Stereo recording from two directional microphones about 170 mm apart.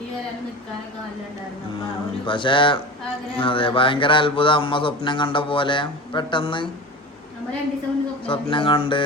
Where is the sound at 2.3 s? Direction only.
30° left (ahead or behind).